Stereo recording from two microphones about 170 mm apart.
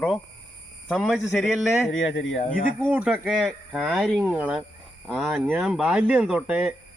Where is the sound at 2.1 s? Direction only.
90° left.